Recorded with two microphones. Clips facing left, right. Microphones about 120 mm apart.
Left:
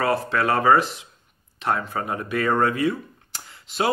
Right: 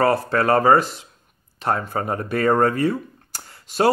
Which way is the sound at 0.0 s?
40° right (ahead or behind).